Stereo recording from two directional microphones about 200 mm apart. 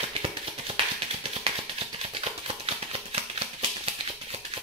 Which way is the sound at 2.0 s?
30° right (ahead or behind).